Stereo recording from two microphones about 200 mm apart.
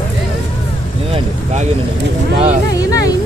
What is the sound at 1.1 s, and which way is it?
Speech, 35° right (ahead or behind).